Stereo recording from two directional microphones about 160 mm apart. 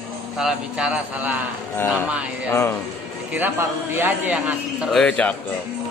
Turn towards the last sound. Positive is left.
turn(degrees=10)  # may be behind; listen again after turning